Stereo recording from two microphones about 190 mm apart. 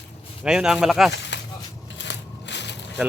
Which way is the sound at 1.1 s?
65° left (ahead or behind).